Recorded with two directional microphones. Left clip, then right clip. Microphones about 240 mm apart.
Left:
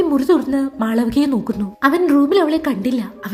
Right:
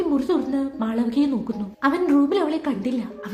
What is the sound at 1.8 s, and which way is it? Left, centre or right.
A woman's voice, left.